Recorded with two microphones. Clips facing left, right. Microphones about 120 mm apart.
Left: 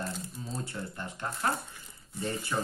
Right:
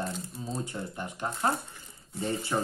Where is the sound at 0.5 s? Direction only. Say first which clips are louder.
Right 2 dB; 20° right (ahead or behind).